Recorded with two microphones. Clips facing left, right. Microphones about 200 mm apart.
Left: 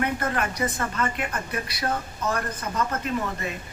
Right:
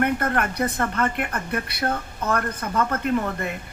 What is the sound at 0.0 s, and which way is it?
A woman's voice, 60° right (ahead or behind).